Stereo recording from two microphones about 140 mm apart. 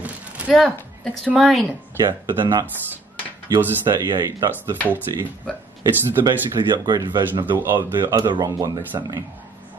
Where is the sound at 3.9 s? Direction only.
30° right (ahead or behind).